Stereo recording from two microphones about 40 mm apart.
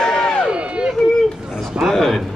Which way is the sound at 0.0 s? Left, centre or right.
Centre.